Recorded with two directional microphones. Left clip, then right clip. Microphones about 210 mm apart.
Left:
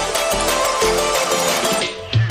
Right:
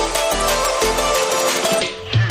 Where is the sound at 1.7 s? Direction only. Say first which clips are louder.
Right 1 dB; centre (ahead or behind).